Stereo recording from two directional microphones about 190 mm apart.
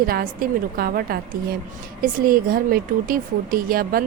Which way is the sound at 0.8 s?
50° right (ahead or behind).